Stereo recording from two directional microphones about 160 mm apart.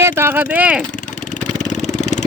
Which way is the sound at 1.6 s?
50° left (ahead or behind).